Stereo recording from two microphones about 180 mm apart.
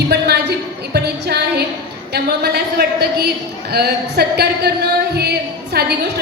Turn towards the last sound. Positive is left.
turn(degrees=-60)  # may be behind; listen again after turning